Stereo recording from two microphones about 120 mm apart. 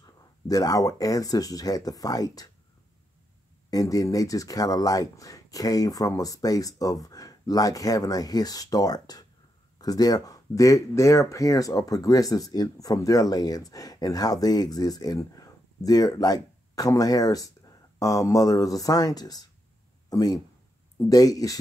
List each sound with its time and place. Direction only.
0.0 s speech: 30° left (ahead or behind)
3.7 s speech: 30° left (ahead or behind)